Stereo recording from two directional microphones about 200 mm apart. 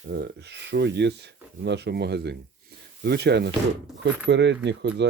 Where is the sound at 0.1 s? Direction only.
55° right (ahead or behind).